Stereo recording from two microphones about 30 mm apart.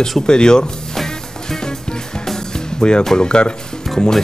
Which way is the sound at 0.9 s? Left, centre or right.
Centre.